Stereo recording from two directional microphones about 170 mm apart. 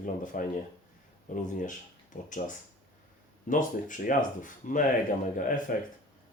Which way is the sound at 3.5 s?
50° left (ahead or behind).